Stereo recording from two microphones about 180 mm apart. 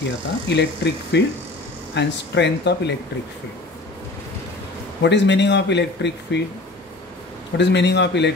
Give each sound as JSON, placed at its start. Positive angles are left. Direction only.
{"t": 0.5, "sound": "a man's voice", "side_deg": 75}
{"t": 5.0, "sound": "a man's voice", "side_deg": 80}
{"t": 7.5, "sound": "a man's voice", "side_deg": 75}